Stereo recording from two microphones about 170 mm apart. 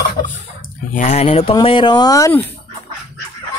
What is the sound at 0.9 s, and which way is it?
Speech, 40° left (ahead or behind).